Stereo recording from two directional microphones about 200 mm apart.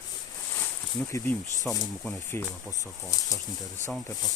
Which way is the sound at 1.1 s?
10° left (ahead or behind).